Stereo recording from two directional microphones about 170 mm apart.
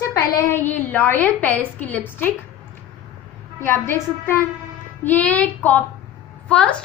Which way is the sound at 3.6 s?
15° left (ahead or behind).